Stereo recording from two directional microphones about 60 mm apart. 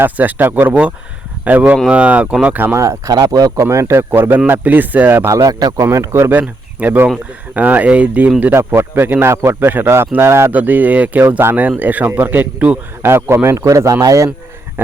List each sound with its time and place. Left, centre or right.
0.0 s speech: right
0.7 s a man's voice: right
2.7 s speech: right
3.7 s speech: right
5.3 s speech: right
6.7 s a man's voice: right
8.5 s speech: right
9.2 s speech: right
10.2 s speech: right
10.5 s a man's voice: right
13.0 s speech: right
13.7 s speech: right